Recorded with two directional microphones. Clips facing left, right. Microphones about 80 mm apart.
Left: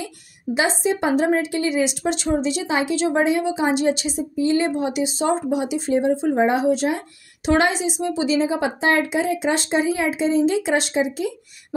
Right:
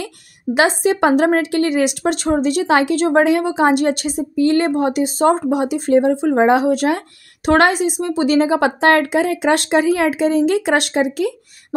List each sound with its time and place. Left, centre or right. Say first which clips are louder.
0.6 s a woman's voice: right 6 dB; right